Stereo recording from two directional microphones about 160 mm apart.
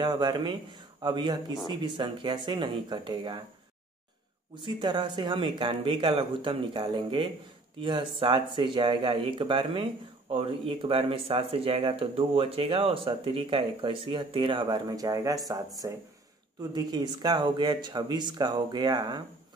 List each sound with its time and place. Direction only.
0.0 s speech: 25° right (ahead or behind)
4.6 s speech: 30° right (ahead or behind)